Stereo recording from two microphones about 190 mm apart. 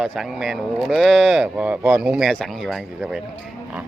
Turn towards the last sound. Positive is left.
turn(degrees=0)  # may be behind; listen again after turning